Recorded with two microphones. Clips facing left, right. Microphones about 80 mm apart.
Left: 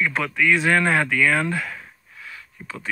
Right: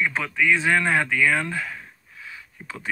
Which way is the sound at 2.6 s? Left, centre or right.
Right.